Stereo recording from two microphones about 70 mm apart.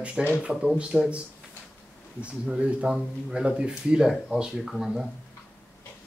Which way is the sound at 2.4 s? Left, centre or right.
Centre.